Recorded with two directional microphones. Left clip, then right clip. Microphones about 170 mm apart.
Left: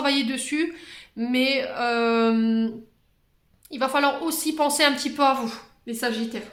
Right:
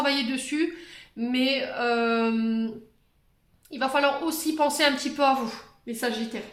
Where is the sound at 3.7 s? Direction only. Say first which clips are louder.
Left 2 dB; 35° left (ahead or behind).